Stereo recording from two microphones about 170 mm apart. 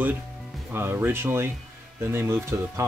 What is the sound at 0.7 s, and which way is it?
Speech, 15° right (ahead or behind).